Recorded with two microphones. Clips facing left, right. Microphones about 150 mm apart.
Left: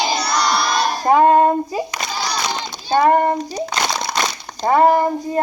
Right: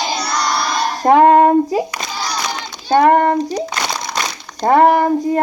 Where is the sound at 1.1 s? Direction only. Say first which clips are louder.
Right 4 dB; 65° right (ahead or behind).